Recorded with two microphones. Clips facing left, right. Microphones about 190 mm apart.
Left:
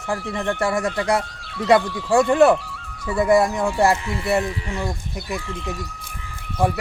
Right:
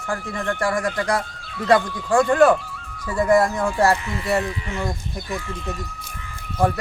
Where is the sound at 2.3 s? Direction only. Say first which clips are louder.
Even; 25° left (ahead or behind).